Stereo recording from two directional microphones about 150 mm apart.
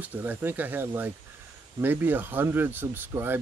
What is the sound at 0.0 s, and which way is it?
Speech, 10° right (ahead or behind).